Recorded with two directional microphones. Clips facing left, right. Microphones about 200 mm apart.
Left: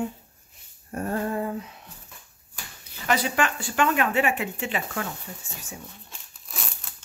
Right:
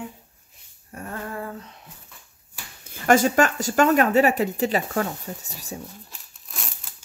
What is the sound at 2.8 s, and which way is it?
Speech, 45° right (ahead or behind).